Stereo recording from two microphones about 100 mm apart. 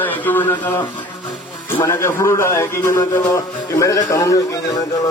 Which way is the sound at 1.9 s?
25° left (ahead or behind).